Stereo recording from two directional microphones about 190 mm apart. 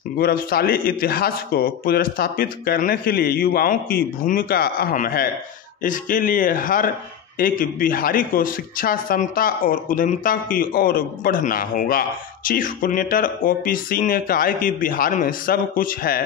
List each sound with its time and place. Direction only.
0.2 s a man's voice: 50° left (ahead or behind)